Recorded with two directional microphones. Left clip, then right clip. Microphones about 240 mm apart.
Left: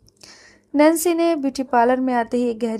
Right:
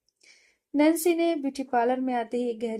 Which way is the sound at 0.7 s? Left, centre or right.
Left.